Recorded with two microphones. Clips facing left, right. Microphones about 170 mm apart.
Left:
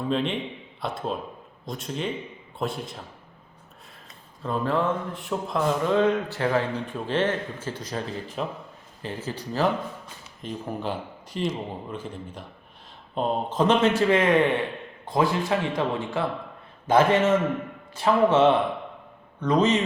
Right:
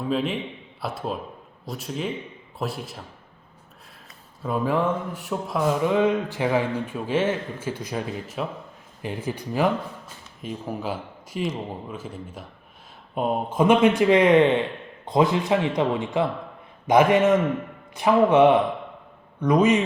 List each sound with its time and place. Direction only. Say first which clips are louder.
0.0 s a man's voice: right 1 dB; 5° right (ahead or behind)
4.4 s a man's voice: right 2 dB; 10° right (ahead or behind)
10.4 s a man's voice: right 1 dB; 5° right (ahead or behind)